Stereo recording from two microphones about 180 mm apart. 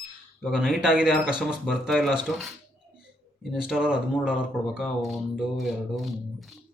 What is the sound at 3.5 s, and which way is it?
Speech, 5° right (ahead or behind).